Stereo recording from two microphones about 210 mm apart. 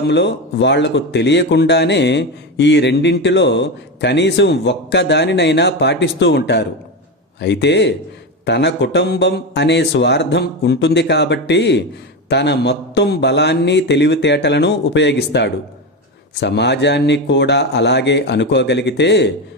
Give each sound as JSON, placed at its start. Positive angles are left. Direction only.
{"t": 0.1, "sound": "speech", "side_deg": 55}